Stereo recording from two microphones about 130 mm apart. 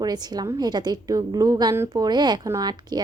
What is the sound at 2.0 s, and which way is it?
A woman's voice, 35° right (ahead or behind).